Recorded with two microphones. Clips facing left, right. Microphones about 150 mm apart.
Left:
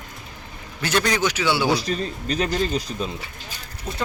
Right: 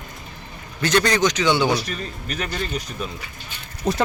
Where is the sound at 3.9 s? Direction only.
75° right (ahead or behind).